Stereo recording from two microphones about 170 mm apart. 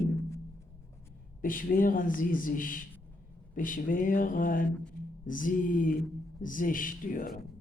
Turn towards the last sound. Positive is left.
turn(degrees=55)  # may be behind; listen again after turning